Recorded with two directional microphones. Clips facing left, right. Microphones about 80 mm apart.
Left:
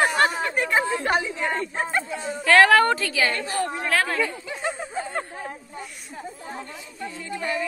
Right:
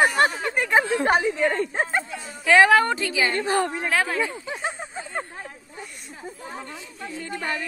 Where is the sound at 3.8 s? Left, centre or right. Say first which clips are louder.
Even; centre.